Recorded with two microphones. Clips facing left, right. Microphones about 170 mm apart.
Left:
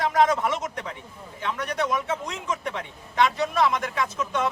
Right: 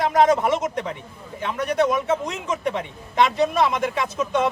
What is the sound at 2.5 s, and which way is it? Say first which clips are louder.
A man's voice: right 5 dB; 20° right (ahead or behind).